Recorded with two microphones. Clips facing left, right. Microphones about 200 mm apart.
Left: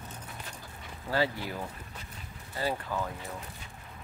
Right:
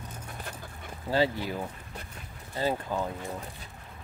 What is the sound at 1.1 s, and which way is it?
Speech, 20° right (ahead or behind).